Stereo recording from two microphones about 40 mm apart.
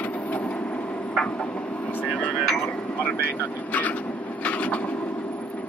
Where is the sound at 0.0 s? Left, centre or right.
Left.